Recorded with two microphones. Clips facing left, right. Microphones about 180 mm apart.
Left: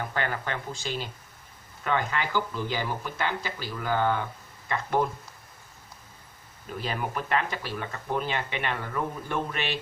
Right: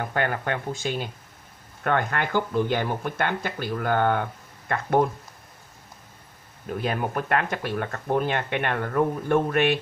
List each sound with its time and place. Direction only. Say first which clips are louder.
0.0 s speech: right 4 dB; 50° right (ahead or behind)
6.8 s speech: right 4 dB; 50° right (ahead or behind)